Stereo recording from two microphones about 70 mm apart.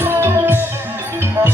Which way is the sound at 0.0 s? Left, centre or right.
Right.